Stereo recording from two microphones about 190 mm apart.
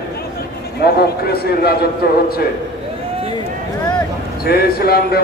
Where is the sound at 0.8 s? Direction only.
55° left (ahead or behind).